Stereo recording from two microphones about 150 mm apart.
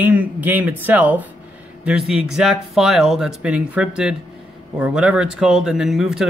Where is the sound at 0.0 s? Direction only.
10° right (ahead or behind).